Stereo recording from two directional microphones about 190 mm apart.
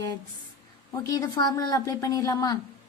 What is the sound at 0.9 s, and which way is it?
A woman's voice, 15° left (ahead or behind).